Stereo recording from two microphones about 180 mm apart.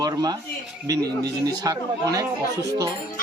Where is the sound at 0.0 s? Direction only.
20° right (ahead or behind).